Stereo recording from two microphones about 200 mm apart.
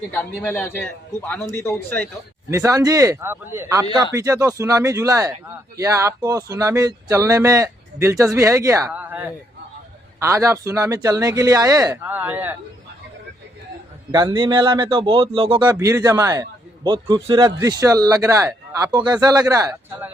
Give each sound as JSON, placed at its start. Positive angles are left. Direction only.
{"t": 0.1, "sound": "a man's voice", "side_deg": 10}
{"t": 2.5, "sound": "speech", "side_deg": -15}
{"t": 14.1, "sound": "a man's voice", "side_deg": -20}